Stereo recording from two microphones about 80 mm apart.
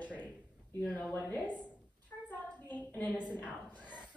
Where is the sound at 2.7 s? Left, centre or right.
Centre.